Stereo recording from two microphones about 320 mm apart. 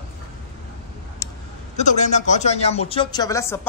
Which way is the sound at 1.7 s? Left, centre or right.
Left.